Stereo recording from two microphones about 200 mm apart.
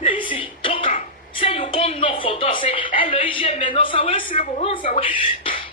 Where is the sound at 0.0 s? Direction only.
25° left (ahead or behind).